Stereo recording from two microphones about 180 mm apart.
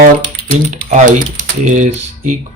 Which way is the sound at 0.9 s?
40° right (ahead or behind).